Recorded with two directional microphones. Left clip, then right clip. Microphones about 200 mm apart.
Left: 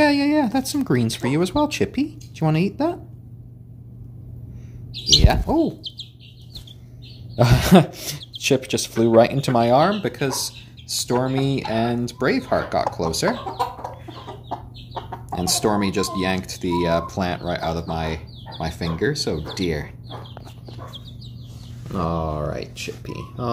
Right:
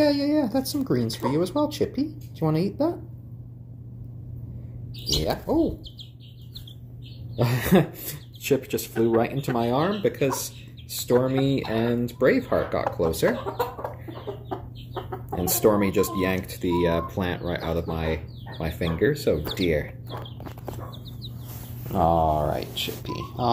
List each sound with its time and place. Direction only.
0.0 s a sound: 45° left (ahead or behind)
0.7 s speech: 50° left (ahead or behind)
5.0 s speech: 50° left (ahead or behind)
7.3 s speech: 40° left (ahead or behind)
15.0 s speech: 35° left (ahead or behind)
21.9 s speech: 35° left (ahead or behind)